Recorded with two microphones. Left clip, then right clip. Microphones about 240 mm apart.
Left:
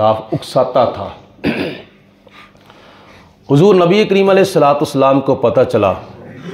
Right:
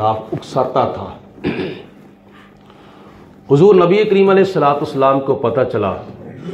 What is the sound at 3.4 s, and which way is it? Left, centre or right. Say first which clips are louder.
A man's voice: even; left.